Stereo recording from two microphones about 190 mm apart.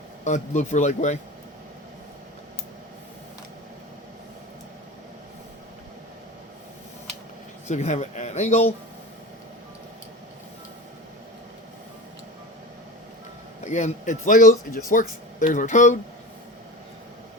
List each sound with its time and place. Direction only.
0.3 s speech: 40° left (ahead or behind)
7.7 s speech: 35° left (ahead or behind)
13.7 s speech: 40° left (ahead or behind)